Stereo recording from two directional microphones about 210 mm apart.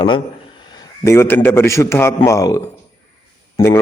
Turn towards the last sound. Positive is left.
turn(degrees=15)  # may be behind; listen again after turning